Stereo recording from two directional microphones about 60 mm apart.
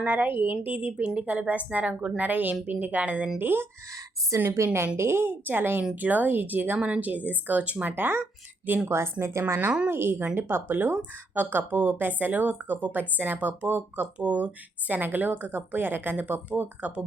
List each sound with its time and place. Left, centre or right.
0.0 s a woman's voice: right
3.3 s a woman's voice: right
4.5 s a woman's voice: right
8.9 s speech: right
9.9 s a woman's voice: right